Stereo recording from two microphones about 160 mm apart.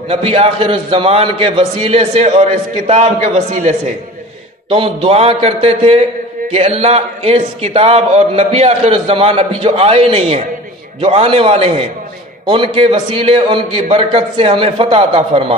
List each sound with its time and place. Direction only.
0.1 s a man's voice: 40° right (ahead or behind)
4.6 s speech: 35° right (ahead or behind)